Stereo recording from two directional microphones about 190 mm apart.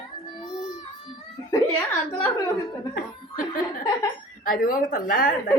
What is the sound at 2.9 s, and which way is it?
Chuckle, 50° left (ahead or behind).